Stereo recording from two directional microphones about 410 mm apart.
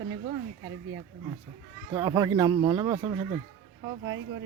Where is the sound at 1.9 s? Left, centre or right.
Centre.